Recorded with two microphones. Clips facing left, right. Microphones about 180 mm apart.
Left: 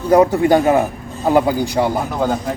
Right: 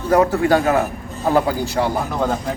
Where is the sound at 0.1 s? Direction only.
15° left (ahead or behind).